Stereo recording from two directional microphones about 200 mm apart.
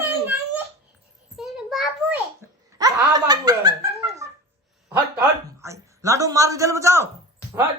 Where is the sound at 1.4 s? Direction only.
Centre (ahead or behind).